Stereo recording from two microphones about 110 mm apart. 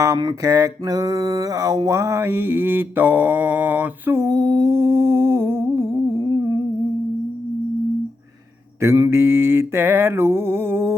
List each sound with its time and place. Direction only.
0.4 s mantra: 30° right (ahead or behind)
8.8 s mantra: 25° right (ahead or behind)